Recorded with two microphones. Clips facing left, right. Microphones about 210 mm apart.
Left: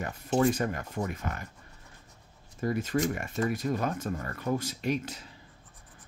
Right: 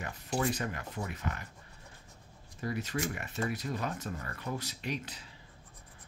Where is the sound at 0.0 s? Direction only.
45° left (ahead or behind).